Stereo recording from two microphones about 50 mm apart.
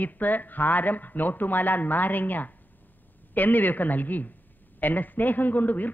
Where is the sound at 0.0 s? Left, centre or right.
Left.